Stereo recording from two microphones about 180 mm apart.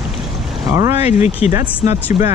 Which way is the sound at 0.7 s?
20° right (ahead or behind).